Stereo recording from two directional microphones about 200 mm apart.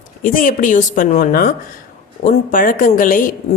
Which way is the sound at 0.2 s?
40° left (ahead or behind).